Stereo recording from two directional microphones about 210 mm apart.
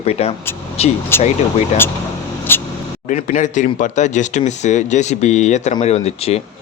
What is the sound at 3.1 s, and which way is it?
Speech, 35° left (ahead or behind).